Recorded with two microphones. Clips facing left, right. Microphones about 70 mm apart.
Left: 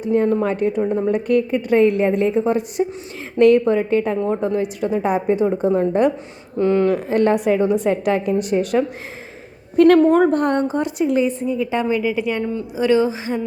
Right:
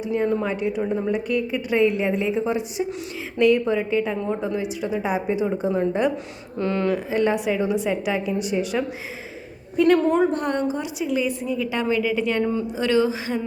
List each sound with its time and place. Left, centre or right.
0.0 s a woman's voice: left
6.6 s speech: left
6.9 s a woman's voice: left
9.7 s a woman's voice: left
11.4 s speech: left
12.4 s speech: centre
12.7 s speech: left